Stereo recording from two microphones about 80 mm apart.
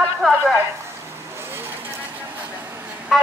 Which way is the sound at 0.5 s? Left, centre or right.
Right.